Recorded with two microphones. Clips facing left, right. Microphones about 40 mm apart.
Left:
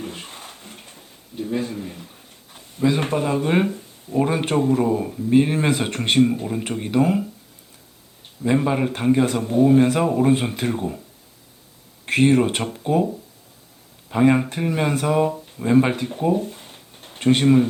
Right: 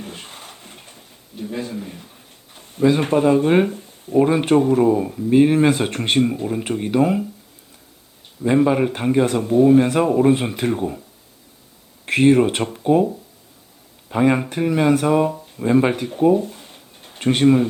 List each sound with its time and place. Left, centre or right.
0.0 s a sound: centre
2.7 s speech: centre
8.4 s speech: centre
12.0 s speech: centre
14.1 s speech: centre